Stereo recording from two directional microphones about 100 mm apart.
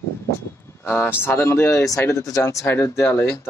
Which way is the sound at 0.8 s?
20° left (ahead or behind).